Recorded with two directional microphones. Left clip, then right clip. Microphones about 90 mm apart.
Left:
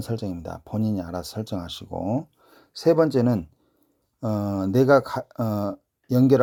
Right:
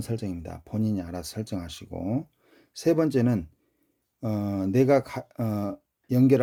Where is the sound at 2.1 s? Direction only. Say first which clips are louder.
Left 4 dB; 30° right (ahead or behind).